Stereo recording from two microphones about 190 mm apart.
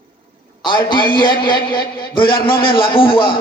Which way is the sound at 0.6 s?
25° left (ahead or behind).